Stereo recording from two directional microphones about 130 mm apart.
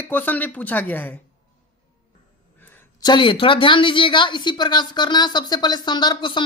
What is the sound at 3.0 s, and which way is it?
Speech, 35° left (ahead or behind).